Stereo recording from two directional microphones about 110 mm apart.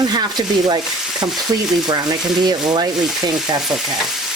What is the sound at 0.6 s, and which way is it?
Stir, 40° right (ahead or behind).